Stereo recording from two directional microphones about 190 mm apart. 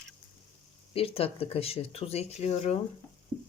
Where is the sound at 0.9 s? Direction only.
30° left (ahead or behind).